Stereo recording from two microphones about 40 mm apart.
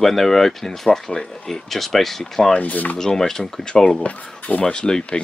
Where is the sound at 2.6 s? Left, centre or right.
Left.